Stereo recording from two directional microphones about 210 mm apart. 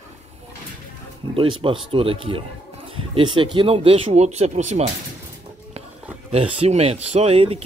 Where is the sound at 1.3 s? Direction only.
25° right (ahead or behind).